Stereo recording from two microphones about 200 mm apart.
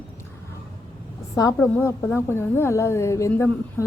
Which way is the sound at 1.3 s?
15° left (ahead or behind).